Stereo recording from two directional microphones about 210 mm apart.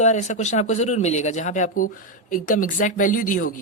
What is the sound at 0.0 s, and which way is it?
A man's voice, 35° left (ahead or behind).